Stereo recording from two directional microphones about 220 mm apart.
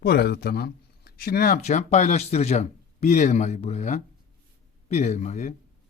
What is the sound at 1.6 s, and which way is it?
A man's voice, 30° left (ahead or behind).